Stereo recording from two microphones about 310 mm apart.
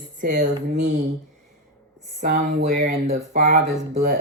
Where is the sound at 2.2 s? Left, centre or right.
Right.